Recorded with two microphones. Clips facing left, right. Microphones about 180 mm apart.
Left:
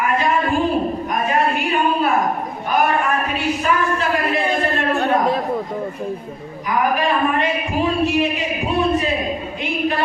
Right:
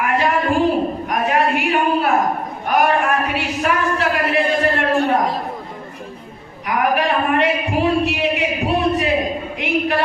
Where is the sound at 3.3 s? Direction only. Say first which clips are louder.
Left 1 dB; 70° right (ahead or behind).